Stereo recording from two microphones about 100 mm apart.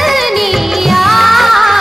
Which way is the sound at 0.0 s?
Centre (ahead or behind).